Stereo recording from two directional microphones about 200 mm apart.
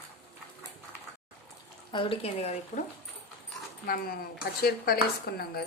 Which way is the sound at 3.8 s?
45° left (ahead or behind).